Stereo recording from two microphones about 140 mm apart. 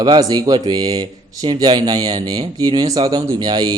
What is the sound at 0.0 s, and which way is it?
Speech, 30° right (ahead or behind).